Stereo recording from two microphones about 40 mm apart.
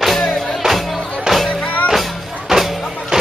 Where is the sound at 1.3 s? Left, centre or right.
Centre.